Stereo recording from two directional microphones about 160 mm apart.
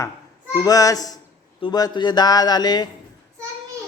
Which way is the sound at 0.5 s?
25° left (ahead or behind).